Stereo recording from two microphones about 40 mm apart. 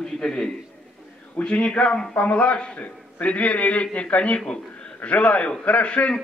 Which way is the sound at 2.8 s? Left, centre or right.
Left.